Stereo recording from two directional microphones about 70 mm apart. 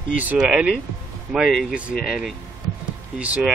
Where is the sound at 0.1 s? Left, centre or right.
Right.